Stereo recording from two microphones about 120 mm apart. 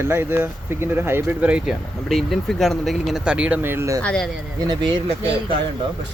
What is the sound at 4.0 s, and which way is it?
Speech, 10° left (ahead or behind).